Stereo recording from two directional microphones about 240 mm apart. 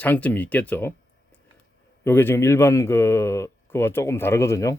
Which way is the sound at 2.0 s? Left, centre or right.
Centre.